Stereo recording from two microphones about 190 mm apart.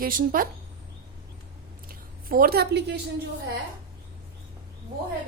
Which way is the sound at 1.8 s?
50° right (ahead or behind).